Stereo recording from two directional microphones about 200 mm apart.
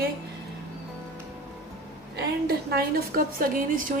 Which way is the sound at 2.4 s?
50° right (ahead or behind).